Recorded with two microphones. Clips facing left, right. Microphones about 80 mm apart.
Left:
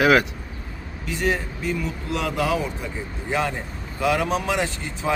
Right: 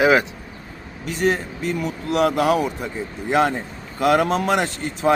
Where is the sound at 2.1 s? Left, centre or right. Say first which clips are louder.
Right 6 dB; right.